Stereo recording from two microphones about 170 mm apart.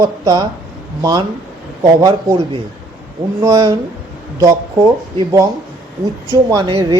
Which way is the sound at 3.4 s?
20° right (ahead or behind).